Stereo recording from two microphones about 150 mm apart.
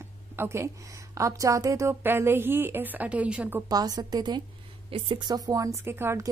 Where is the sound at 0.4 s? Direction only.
15° right (ahead or behind).